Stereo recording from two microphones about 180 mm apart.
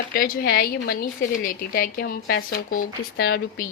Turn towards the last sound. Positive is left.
turn(degrees=60)  # may be behind; listen again after turning